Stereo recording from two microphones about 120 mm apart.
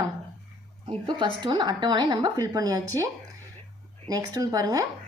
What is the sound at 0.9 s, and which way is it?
Speech, 45° right (ahead or behind).